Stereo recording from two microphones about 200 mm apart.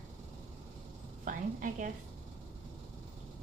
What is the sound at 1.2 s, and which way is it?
Speech, 45° right (ahead or behind).